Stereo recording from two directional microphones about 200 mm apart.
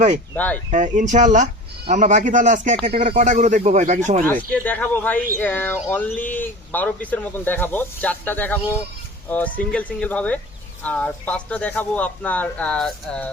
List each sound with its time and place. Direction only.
0.3 s speech: 5° left (ahead or behind)
0.7 s speech: 40° right (ahead or behind)
4.5 s speech: 10° left (ahead or behind)